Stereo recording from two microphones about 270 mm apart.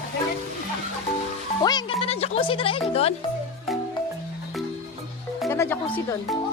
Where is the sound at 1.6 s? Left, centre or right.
Centre.